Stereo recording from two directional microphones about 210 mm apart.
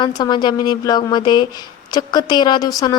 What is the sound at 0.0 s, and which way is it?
A woman's voice, 20° left (ahead or behind).